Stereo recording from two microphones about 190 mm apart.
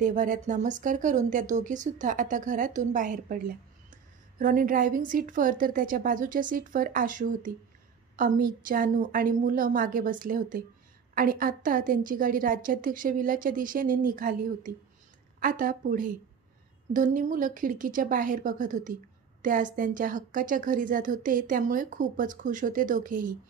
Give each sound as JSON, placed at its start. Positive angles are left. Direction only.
{"t": 0.0, "sound": "a woman's voice", "side_deg": -40}